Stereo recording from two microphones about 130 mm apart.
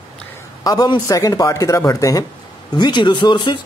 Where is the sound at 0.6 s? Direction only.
30° left (ahead or behind).